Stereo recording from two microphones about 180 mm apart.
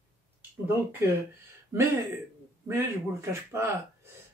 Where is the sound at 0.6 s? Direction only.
15° right (ahead or behind).